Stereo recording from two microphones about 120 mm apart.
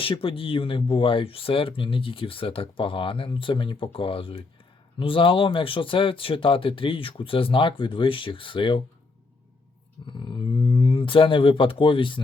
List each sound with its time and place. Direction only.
0.0 s speech: 50° left (ahead or behind)
10.1 s speech: 40° left (ahead or behind)